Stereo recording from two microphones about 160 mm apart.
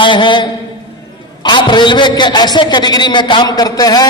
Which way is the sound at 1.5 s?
30° left (ahead or behind).